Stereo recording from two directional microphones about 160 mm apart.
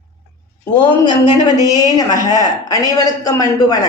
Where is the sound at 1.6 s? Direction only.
25° left (ahead or behind).